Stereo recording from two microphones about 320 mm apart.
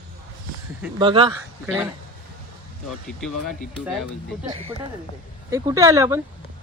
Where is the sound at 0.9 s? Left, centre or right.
Centre.